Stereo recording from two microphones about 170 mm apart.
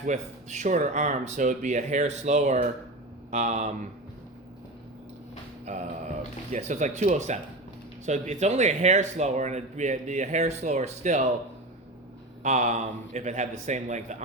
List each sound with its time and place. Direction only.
0.0 s speech: 45° right (ahead or behind)
5.7 s speech: 45° right (ahead or behind)
12.4 s speech: 40° right (ahead or behind)